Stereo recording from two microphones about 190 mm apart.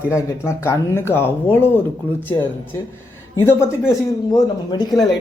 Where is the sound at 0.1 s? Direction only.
15° left (ahead or behind).